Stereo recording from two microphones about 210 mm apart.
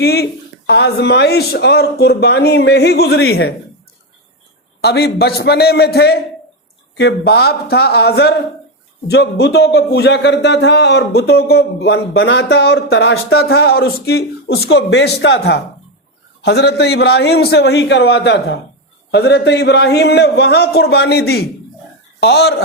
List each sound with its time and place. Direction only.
0.0 s a man's voice: 50° left (ahead or behind)
4.8 s a man's voice: 50° left (ahead or behind)